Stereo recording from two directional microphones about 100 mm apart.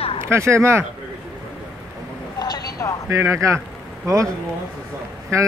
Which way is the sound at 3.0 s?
30° right (ahead or behind).